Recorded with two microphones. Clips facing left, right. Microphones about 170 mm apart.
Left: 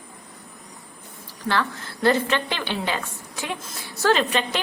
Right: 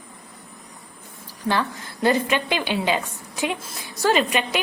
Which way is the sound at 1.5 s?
15° right (ahead or behind).